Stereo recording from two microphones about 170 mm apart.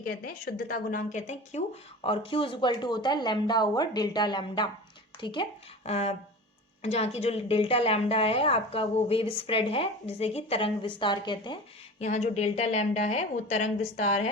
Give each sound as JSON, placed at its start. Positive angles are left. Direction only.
{"t": 0.3, "sound": "a woman's voice", "side_deg": 55}
{"t": 11.9, "sound": "a woman's voice", "side_deg": 40}